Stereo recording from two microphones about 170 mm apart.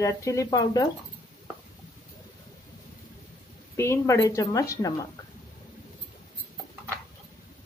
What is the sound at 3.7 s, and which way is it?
A woman's voice, 15° left (ahead or behind).